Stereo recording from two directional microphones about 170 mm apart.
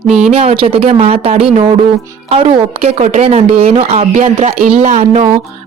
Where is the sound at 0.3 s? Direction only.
35° right (ahead or behind).